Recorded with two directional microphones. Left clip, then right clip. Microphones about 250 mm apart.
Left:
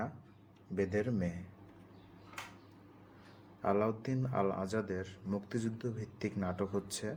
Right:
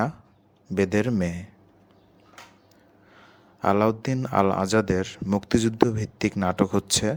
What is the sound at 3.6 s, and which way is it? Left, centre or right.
Speech, right.